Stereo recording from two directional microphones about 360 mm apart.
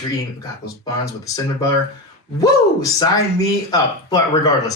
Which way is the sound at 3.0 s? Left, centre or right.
Centre.